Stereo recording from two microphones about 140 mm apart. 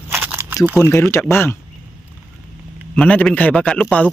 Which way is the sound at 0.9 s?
20° left (ahead or behind).